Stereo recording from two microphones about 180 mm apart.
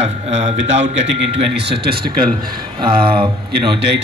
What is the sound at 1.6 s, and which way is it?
Speech, 65° right (ahead or behind).